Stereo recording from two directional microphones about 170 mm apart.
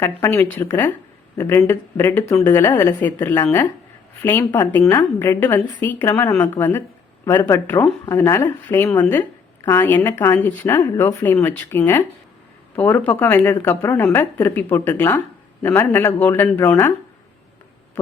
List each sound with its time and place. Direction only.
0.0 s a woman's voice: 15° left (ahead or behind)